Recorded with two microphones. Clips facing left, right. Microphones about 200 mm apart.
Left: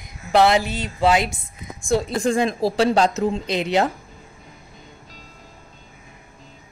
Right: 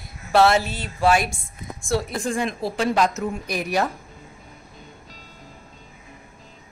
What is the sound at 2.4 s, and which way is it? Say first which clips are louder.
Speech: left 5 dB; 35° left (ahead or behind).